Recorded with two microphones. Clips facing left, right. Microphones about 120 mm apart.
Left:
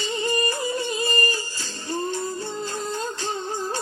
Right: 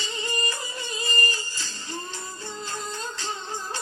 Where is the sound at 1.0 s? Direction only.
45° left (ahead or behind).